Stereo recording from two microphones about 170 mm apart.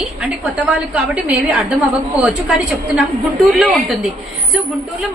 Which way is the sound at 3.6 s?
Centre (ahead or behind).